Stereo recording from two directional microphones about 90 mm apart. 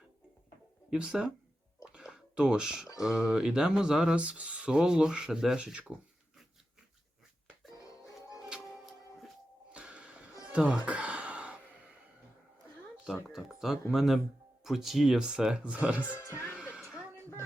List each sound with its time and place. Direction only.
0.9 s speech: 10° right (ahead or behind)
1.8 s a sound: 10° right (ahead or behind)
3.0 s speech: 5° right (ahead or behind)
7.8 s music: 40° left (ahead or behind)
9.7 s music: 10° right (ahead or behind)
10.5 s speech: 10° right (ahead or behind)
10.8 s sigh: 15° right (ahead or behind)
13.2 s speech: centre (ahead or behind)
16.2 s music: 30° left (ahead or behind)
16.5 s music: 10° right (ahead or behind)